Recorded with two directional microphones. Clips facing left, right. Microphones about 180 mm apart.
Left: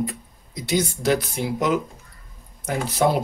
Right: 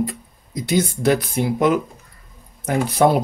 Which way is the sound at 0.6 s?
55° right (ahead or behind).